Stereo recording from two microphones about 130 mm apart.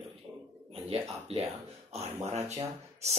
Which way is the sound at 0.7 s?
50° right (ahead or behind).